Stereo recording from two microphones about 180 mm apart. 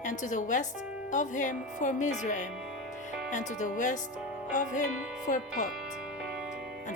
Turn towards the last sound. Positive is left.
turn(degrees=45)  # may be behind; listen again after turning